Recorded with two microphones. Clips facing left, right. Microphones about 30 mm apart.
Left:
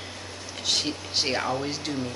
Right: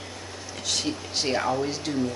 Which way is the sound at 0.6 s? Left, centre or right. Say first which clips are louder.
Left 2 dB; left.